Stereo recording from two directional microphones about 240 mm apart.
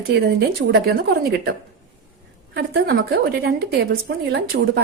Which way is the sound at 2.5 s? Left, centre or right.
Right.